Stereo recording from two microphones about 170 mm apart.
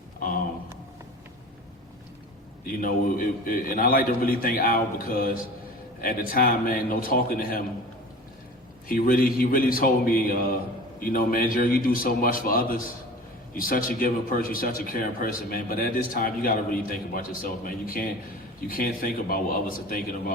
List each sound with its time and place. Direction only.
2.6 s a man's voice: 55° left (ahead or behind)
8.9 s a man's voice: 60° left (ahead or behind)